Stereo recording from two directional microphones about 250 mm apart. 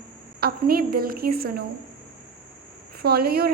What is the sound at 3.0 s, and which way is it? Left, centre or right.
Speech, right.